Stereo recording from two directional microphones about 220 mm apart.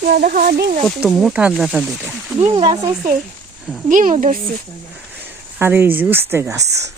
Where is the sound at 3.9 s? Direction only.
35° right (ahead or behind).